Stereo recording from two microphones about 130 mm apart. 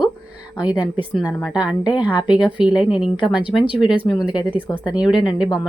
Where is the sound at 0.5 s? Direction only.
35° left (ahead or behind).